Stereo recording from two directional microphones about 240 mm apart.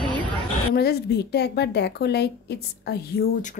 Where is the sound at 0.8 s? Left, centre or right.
Left.